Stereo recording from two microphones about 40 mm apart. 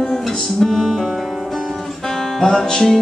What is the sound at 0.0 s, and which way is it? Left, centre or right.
Music, centre.